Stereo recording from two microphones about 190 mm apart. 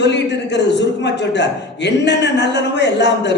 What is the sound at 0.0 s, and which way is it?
A man's voice, 65° left (ahead or behind).